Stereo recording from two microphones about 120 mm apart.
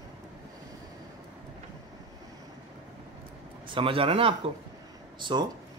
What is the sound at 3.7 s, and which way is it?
Speech, 45° right (ahead or behind).